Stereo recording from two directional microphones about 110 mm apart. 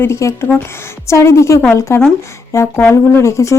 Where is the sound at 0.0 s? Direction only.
25° left (ahead or behind).